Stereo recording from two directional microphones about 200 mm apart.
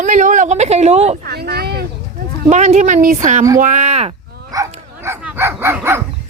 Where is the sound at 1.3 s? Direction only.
55° right (ahead or behind).